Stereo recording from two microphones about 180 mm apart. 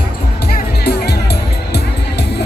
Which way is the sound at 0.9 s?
65° left (ahead or behind).